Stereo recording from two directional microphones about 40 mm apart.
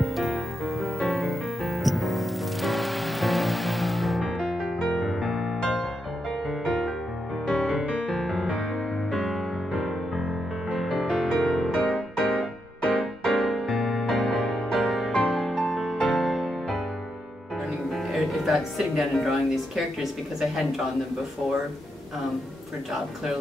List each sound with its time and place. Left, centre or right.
0.0 s music: centre; by 7.8 s left
8.2 s music: centre
10.8 s music: centre
11.1 s music: left; by 15.1 s centre
15.3 s music: centre
17.9 s speech: centre